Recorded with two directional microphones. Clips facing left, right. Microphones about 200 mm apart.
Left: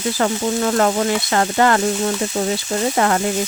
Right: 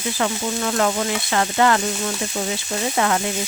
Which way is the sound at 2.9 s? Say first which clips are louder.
Left 2 dB; 45° left (ahead or behind).